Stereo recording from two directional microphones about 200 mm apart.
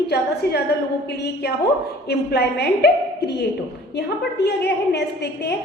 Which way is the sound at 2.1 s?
55° left (ahead or behind).